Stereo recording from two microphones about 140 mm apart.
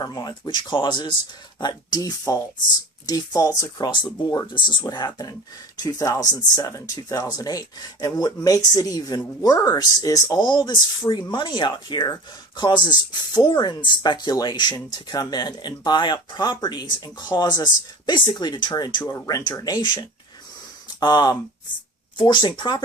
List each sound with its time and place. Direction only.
0.0 s speech: 30° left (ahead or behind)